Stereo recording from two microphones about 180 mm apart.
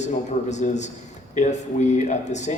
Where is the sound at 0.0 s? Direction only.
40° left (ahead or behind).